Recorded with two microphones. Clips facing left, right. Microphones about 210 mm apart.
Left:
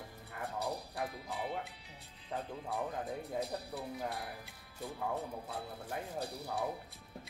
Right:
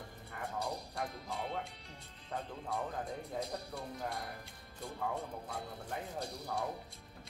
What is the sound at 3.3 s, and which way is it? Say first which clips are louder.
Speech: left 1 dB; 5° left (ahead or behind).